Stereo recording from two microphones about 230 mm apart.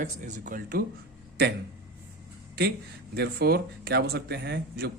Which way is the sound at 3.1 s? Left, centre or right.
Right.